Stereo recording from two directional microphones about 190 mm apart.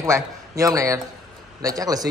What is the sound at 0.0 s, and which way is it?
A man's voice, 15° right (ahead or behind).